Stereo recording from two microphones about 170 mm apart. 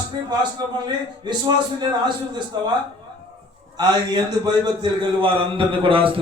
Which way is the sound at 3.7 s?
25° right (ahead or behind).